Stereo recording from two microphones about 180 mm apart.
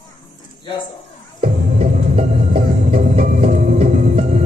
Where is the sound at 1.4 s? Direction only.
40° right (ahead or behind).